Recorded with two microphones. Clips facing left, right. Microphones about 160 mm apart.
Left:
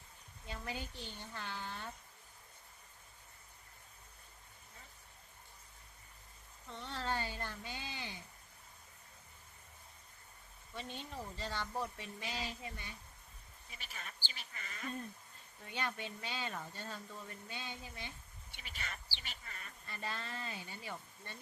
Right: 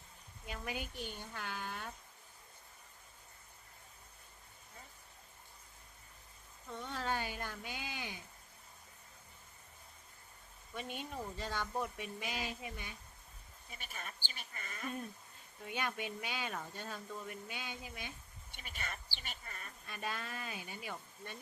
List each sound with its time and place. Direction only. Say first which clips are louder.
0.4 s speech: right 1 dB; 15° right (ahead or behind)
6.7 s speech: right 1 dB; 10° right (ahead or behind)
10.8 s speech: right 2 dB; 15° right (ahead or behind)
13.7 s speech: right 3 dB; 50° right (ahead or behind)
15.6 s speech: right 2 dB; 15° right (ahead or behind)
18.5 s speech: right 2 dB; 50° right (ahead or behind)
19.9 s speech: right 1 dB; 15° right (ahead or behind)